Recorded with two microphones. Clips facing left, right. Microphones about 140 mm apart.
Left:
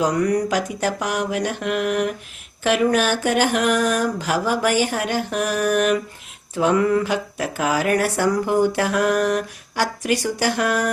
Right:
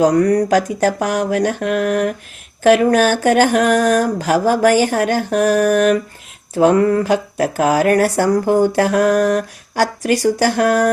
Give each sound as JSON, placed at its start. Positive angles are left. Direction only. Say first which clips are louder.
{"t": 0.0, "sound": "speech", "louder": "right 6 dB", "side_deg": -45}